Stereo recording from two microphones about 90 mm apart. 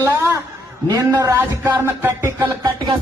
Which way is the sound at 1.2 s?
30° right (ahead or behind).